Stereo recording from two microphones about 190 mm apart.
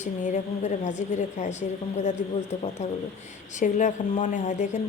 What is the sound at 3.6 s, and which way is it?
Speech, 40° left (ahead or behind).